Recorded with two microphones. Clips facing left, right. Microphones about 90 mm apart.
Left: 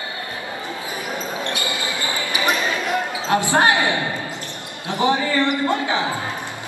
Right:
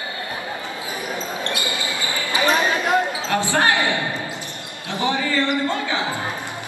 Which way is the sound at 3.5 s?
20° left (ahead or behind).